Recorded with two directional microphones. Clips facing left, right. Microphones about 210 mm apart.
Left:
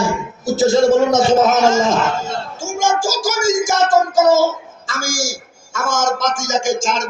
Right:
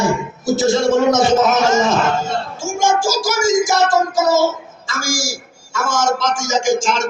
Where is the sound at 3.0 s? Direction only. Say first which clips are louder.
Right 1 dB; 50° left (ahead or behind).